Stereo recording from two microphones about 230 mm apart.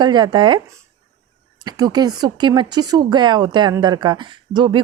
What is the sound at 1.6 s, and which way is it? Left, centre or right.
A woman's voice, centre.